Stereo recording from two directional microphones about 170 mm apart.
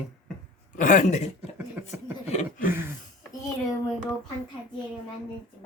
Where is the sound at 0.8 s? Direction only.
50° left (ahead or behind).